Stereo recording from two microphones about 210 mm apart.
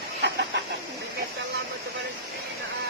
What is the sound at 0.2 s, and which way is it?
Chicken, 55° right (ahead or behind).